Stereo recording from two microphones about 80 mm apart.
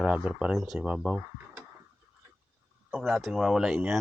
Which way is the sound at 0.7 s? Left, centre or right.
Centre.